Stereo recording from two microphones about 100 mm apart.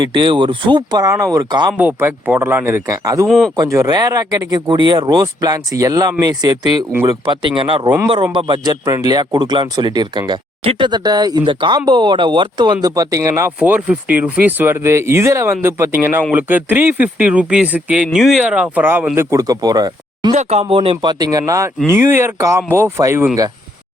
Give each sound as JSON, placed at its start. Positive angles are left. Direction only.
{"t": 0.0, "sound": "speech", "side_deg": -55}
{"t": 2.0, "sound": "speech", "side_deg": -20}
{"t": 2.9, "sound": "speech", "side_deg": -35}
{"t": 3.2, "sound": "speech", "side_deg": 0}
{"t": 3.5, "sound": "speech", "side_deg": -35}
{"t": 10.6, "sound": "speech", "side_deg": -60}
{"t": 11.4, "sound": "speech", "side_deg": -55}
{"t": 13.6, "sound": "speech", "side_deg": -10}
{"t": 19.4, "sound": "speech", "side_deg": -40}
{"t": 20.5, "sound": "speech", "side_deg": -80}
{"t": 21.1, "sound": "speech", "side_deg": -40}